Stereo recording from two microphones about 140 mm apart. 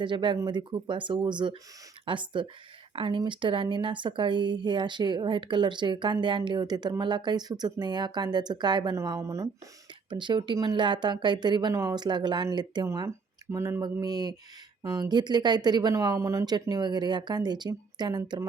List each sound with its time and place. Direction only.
0.0 s speech: 35° right (ahead or behind)
10.1 s speech: 35° right (ahead or behind)
11.7 s speech: 20° right (ahead or behind)